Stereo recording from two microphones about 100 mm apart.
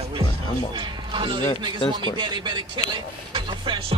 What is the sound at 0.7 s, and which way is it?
Speech, 55° right (ahead or behind).